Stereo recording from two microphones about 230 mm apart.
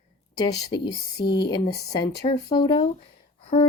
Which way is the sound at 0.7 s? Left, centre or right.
Centre.